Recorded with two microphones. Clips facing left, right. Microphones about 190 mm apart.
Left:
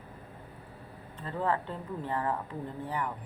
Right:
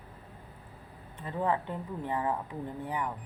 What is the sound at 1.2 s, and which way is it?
Speech, 15° right (ahead or behind).